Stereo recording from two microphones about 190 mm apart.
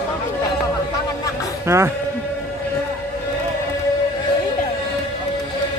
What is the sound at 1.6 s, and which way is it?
Speech, 15° right (ahead or behind).